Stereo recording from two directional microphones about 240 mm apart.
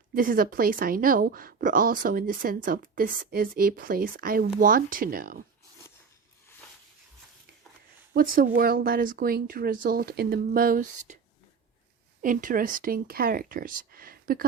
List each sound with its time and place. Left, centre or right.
0.1 s speech: right
8.1 s speech: right
12.2 s speech: right